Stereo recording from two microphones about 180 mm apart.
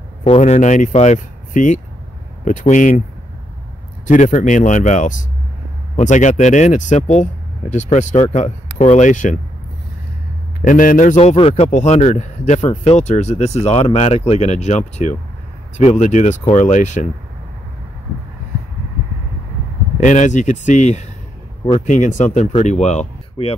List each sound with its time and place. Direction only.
0.2 s a man's voice: 35° left (ahead or behind)
4.1 s a man's voice: 40° left (ahead or behind)
10.6 s a man's voice: 50° left (ahead or behind)
20.0 s a man's voice: 45° left (ahead or behind)